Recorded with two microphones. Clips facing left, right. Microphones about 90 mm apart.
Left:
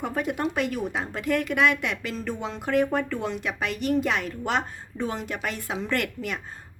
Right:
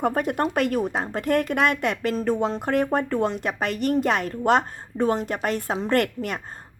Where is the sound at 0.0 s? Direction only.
45° right (ahead or behind).